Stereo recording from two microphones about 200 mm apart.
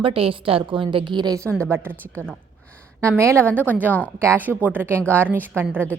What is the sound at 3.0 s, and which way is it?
A woman's voice, 15° right (ahead or behind).